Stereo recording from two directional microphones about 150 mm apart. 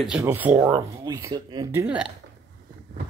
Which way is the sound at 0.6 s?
25° right (ahead or behind).